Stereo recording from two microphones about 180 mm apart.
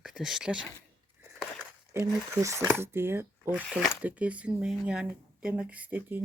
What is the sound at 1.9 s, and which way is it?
Speech, 15° right (ahead or behind).